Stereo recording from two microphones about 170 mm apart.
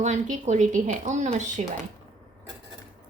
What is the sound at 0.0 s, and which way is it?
Speech, 45° right (ahead or behind).